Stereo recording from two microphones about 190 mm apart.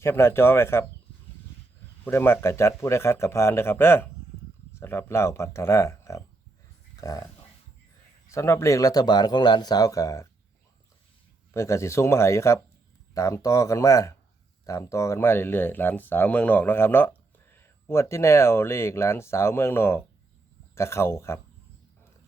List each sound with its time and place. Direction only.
0.0 s speech: 15° left (ahead or behind)
2.0 s speech: 10° left (ahead or behind)
8.3 s speech: 15° left (ahead or behind)
11.5 s speech: 15° left (ahead or behind)